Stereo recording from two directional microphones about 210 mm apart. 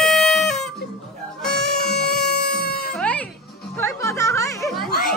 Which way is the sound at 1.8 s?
50° left (ahead or behind).